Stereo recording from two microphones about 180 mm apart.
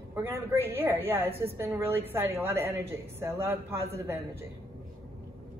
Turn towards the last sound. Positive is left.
turn(degrees=-15)  # may be behind; listen again after turning